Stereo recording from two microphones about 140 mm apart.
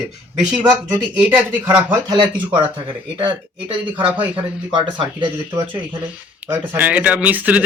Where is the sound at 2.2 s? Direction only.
35° right (ahead or behind).